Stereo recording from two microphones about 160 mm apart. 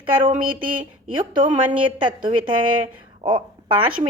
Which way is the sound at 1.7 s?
30° right (ahead or behind).